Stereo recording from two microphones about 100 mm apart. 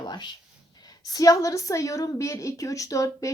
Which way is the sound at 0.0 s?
45° left (ahead or behind).